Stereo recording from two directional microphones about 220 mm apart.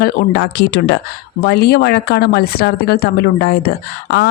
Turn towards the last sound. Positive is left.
turn(degrees=45)  # may be behind; listen again after turning